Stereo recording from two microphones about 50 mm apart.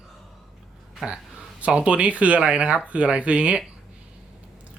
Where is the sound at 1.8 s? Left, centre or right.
Right.